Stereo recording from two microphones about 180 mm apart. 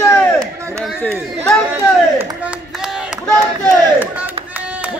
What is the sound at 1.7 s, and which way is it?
Speech, 10° right (ahead or behind).